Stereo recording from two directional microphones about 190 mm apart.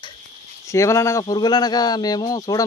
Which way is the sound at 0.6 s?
15° left (ahead or behind).